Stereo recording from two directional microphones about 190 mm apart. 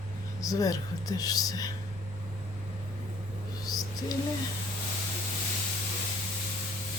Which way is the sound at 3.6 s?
20° left (ahead or behind).